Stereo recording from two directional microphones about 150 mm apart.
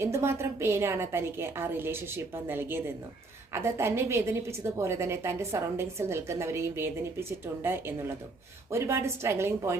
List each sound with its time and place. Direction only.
0.0 s a woman's voice: 15° right (ahead or behind)